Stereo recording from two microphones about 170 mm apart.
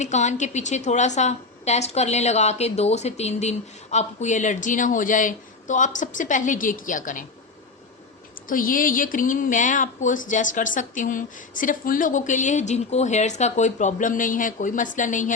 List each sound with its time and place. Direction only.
0.0 s a woman's voice: 45° left (ahead or behind)
8.4 s a woman's voice: 55° left (ahead or behind)